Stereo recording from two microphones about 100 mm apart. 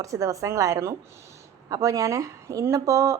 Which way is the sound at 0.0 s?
30° right (ahead or behind).